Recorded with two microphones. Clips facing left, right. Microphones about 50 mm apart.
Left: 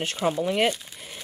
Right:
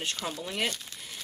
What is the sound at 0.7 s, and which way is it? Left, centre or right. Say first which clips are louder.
Speech: left 8 dB; centre.